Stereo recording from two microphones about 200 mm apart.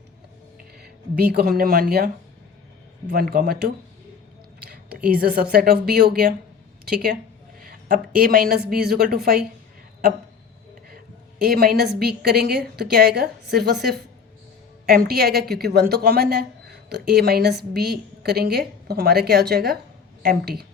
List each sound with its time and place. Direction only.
0.8 s speech: 50° right (ahead or behind)
3.1 s a woman's voice: 50° right (ahead or behind)
4.7 s a woman's voice: 45° right (ahead or behind)
10.8 s a woman's voice: 50° right (ahead or behind)